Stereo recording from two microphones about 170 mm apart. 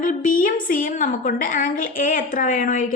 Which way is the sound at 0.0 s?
55° left (ahead or behind).